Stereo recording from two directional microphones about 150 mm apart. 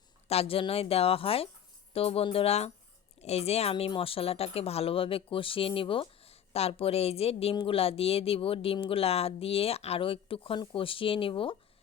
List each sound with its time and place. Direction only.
0.3 s speech: 40° left (ahead or behind)